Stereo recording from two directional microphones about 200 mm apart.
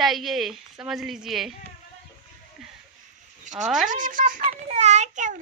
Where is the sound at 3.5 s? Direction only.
5° right (ahead or behind).